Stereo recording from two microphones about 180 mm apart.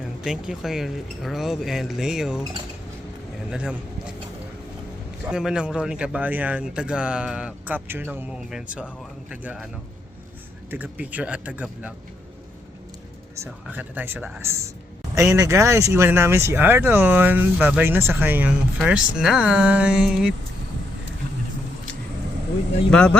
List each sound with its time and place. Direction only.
0.3 s speech: 5° right (ahead or behind)
3.5 s speech: 5° right (ahead or behind)
5.3 s speech: 5° right (ahead or behind)
10.7 s speech: 10° right (ahead or behind)
13.3 s speech: 15° right (ahead or behind)
22.9 s speech: 5° left (ahead or behind)